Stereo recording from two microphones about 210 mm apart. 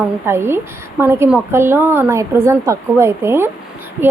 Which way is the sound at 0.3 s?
10° right (ahead or behind).